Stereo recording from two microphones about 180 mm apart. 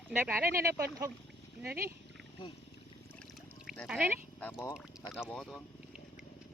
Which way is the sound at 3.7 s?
5° right (ahead or behind).